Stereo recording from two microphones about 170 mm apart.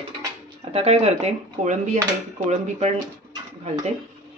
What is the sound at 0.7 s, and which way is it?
Speech, 40° right (ahead or behind).